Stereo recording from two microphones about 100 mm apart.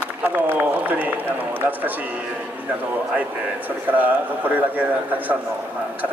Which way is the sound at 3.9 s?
15° right (ahead or behind).